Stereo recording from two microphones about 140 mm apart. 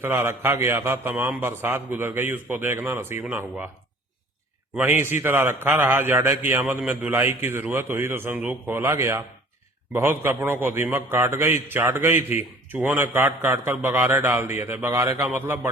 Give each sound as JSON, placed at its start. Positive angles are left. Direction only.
{"t": 0.0, "sound": "a man's voice", "side_deg": -15}
{"t": 4.7, "sound": "a man's voice", "side_deg": -15}